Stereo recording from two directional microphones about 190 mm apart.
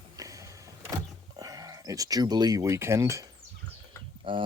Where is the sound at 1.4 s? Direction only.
20° right (ahead or behind).